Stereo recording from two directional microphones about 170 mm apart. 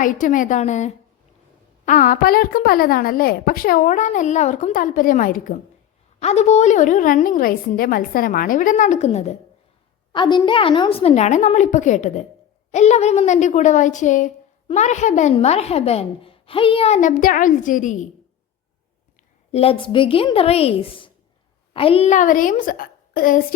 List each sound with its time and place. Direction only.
0.0 s a woman's voice: 50° left (ahead or behind)
6.1 s a woman's voice: 40° left (ahead or behind)
10.1 s a woman's voice: 25° left (ahead or behind); by 18.1 s 50° left (ahead or behind)
19.5 s a woman's voice: 35° left (ahead or behind); by 23.6 s 55° left (ahead or behind)